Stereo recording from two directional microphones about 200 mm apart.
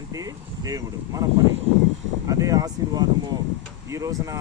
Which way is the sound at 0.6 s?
15° right (ahead or behind).